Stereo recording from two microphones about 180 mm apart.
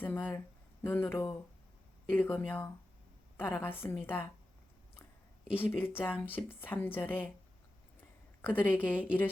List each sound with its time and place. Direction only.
0.0 s a woman's voice: 10° left (ahead or behind)
5.5 s a woman's voice: 10° left (ahead or behind)
8.4 s a woman's voice: 10° left (ahead or behind)